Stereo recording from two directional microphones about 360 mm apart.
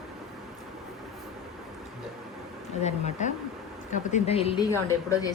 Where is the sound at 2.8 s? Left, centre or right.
Centre.